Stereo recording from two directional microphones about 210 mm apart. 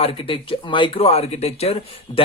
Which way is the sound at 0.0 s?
25° left (ahead or behind).